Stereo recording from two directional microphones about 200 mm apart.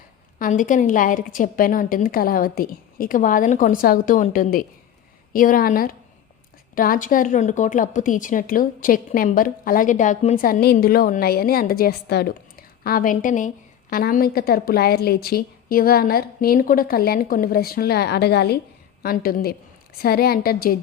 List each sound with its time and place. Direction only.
0.3 s a woman's voice: 40° left (ahead or behind)